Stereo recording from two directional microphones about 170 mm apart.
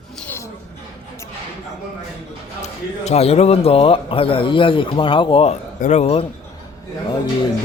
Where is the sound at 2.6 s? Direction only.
40° left (ahead or behind).